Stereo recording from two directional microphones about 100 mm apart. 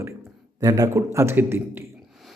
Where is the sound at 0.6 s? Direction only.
35° right (ahead or behind).